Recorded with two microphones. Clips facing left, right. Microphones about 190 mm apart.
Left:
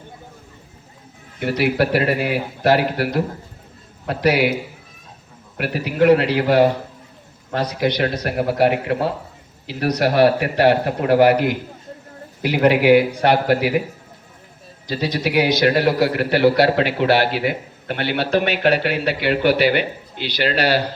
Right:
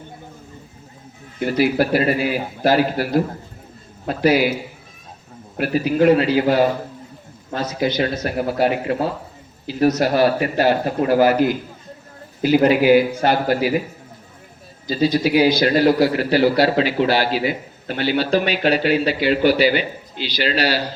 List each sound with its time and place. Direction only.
1.4 s a man's voice: 65° left (ahead or behind)
5.5 s a man's voice: 65° left (ahead or behind)
7.7 s a man's voice: 65° left (ahead or behind)
14.8 s a man's voice: 65° left (ahead or behind)